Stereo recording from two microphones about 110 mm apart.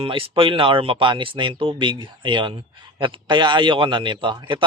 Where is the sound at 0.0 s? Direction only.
55° right (ahead or behind).